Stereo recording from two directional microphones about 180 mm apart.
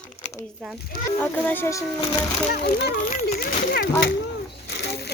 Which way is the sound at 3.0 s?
40° left (ahead or behind).